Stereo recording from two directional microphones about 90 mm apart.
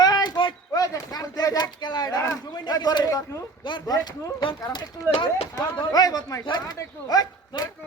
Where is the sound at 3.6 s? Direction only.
50° left (ahead or behind).